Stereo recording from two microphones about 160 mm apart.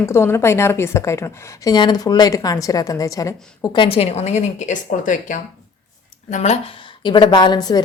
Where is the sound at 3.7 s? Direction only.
35° left (ahead or behind).